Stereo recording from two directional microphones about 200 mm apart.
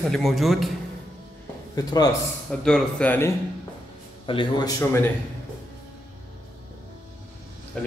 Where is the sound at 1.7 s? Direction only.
20° left (ahead or behind).